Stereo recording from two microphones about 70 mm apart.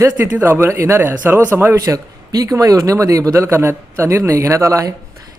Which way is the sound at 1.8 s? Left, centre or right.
Right.